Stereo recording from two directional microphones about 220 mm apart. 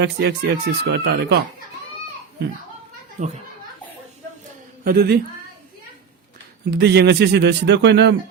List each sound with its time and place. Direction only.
0.0 s speech: 50° right (ahead or behind)
3.2 s a child's voice: 35° right (ahead or behind)
4.8 s a man's voice: 45° right (ahead or behind)
6.7 s speech: 50° right (ahead or behind)